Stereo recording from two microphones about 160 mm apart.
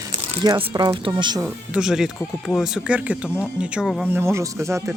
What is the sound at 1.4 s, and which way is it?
Speech, 5° right (ahead or behind).